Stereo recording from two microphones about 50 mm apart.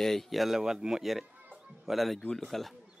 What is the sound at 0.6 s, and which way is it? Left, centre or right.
A man's voice, centre.